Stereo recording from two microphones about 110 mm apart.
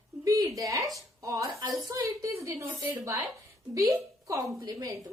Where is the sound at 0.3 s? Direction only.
30° right (ahead or behind).